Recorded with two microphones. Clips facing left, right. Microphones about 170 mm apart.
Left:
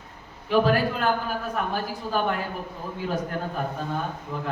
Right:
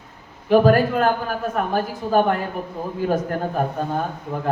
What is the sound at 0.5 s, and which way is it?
A man's voice, 45° right (ahead or behind).